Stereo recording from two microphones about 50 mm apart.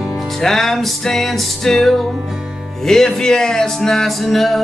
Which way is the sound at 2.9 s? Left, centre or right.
Centre.